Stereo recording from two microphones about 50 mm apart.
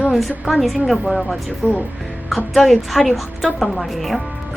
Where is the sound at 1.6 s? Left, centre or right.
Left.